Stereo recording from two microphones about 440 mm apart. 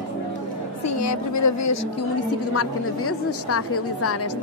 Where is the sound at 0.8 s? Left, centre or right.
Left.